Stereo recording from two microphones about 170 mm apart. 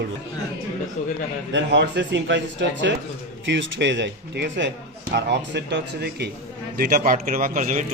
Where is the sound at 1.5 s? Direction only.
90° right; by 6.3 s 75° right (ahead or behind).